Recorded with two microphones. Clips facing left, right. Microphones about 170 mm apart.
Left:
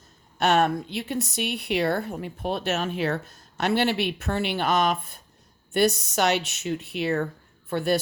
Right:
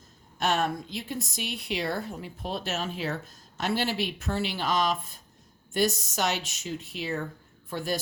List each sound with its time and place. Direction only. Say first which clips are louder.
0.3 s a woman's voice: left 6 dB; 65° left (ahead or behind)